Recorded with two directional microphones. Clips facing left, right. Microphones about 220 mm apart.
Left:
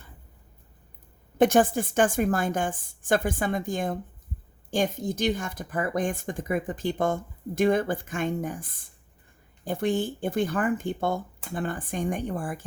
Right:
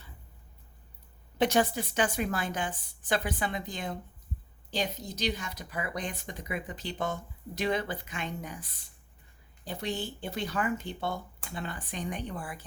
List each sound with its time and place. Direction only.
1.4 s speech: 50° left (ahead or behind)